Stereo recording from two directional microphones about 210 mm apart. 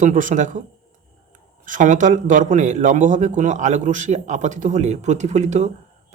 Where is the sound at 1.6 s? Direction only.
40° right (ahead or behind).